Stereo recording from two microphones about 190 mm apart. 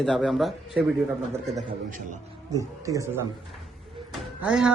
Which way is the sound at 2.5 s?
15° right (ahead or behind).